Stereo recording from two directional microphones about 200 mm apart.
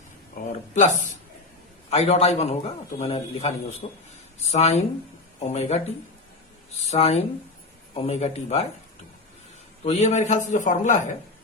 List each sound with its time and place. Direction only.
0.3 s a man's voice: 40° left (ahead or behind)
6.9 s a man's voice: 30° left (ahead or behind)
9.8 s a man's voice: 35° left (ahead or behind)